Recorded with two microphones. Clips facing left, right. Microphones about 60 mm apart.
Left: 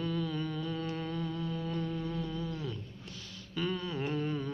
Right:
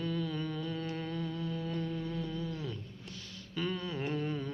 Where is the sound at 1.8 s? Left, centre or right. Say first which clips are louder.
Left 1 dB; left.